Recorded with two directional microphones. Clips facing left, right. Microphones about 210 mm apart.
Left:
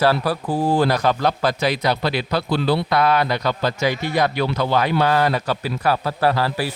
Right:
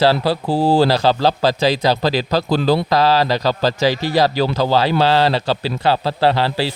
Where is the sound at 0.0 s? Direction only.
30° right (ahead or behind).